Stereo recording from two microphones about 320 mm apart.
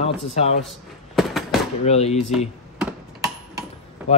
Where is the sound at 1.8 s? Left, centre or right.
Centre.